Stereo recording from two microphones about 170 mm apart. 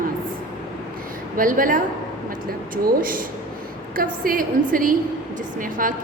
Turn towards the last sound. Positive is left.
turn(degrees=-55)  # may be behind; listen again after turning